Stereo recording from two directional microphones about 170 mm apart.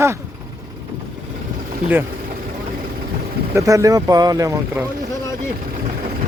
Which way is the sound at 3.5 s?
20° right (ahead or behind).